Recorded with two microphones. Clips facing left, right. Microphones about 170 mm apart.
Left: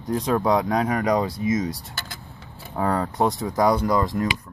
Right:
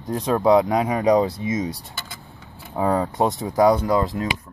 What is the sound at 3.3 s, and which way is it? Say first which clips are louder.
Speech: right 5 dB; 25° right (ahead or behind).